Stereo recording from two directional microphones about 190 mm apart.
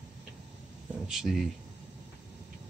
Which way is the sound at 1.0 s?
Centre (ahead or behind).